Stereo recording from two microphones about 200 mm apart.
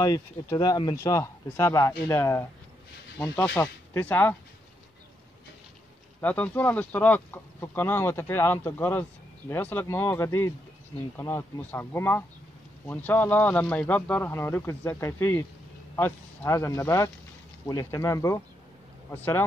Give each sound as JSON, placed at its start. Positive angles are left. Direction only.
{"t": 0.0, "sound": "speech", "side_deg": 20}
{"t": 6.2, "sound": "speech", "side_deg": 10}